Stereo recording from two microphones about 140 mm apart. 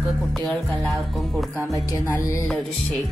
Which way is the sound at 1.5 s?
20° right (ahead or behind).